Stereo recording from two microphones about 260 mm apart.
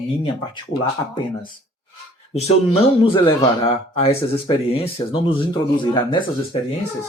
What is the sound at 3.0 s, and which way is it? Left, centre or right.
Speech, centre.